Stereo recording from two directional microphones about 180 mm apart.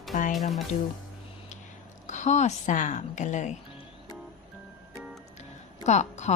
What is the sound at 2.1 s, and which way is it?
A woman's voice, 40° left (ahead or behind).